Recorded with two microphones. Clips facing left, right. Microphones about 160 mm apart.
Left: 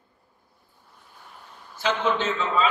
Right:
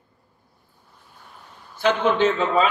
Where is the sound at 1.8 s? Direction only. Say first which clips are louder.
Right 5 dB; 60° right (ahead or behind).